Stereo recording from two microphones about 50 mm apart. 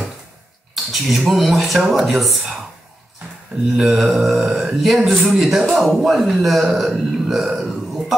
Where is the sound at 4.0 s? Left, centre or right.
Centre.